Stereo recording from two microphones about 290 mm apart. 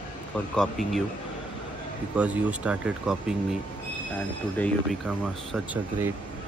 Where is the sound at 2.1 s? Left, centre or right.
Centre.